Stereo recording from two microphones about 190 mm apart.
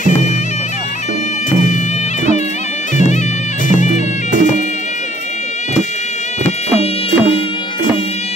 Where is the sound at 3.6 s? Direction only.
40° left (ahead or behind).